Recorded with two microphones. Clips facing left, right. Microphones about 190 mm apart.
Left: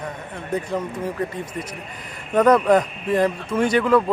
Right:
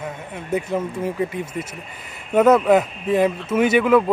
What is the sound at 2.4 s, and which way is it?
Speech, 5° right (ahead or behind).